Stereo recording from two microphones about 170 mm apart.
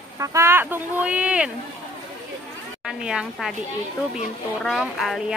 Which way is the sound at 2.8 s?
5° right (ahead or behind).